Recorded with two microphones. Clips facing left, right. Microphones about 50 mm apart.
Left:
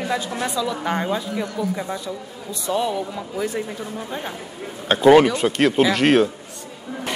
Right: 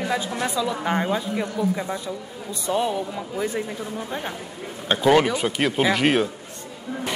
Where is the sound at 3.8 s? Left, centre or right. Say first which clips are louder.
Even; centre.